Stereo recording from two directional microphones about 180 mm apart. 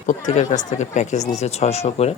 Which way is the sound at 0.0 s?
40° left (ahead or behind).